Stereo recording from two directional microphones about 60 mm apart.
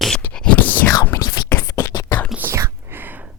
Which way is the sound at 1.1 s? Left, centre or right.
Left.